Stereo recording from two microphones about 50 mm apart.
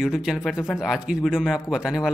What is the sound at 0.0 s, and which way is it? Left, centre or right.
Speech, centre.